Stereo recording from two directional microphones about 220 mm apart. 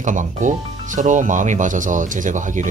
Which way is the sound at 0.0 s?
35° right (ahead or behind).